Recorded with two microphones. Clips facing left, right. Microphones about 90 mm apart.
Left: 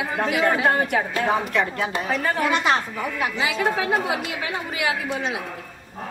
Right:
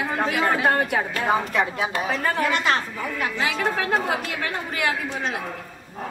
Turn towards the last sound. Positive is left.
turn(degrees=5)  # may be behind; listen again after turning